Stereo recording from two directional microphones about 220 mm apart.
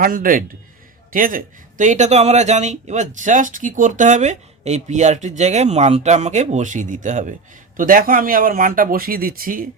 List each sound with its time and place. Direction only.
0.0 s speech: 40° right (ahead or behind)